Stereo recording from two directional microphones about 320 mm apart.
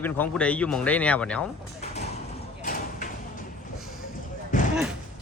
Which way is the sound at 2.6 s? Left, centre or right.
Left.